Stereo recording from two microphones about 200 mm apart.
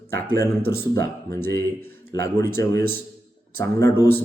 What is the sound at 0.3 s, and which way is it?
A man's voice, 15° left (ahead or behind).